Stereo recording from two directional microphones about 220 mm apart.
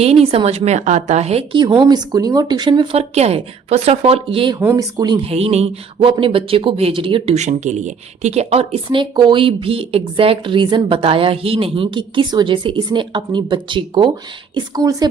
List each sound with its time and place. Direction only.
0.0 s speech: 25° right (ahead or behind)
4.6 s speech: 10° right (ahead or behind)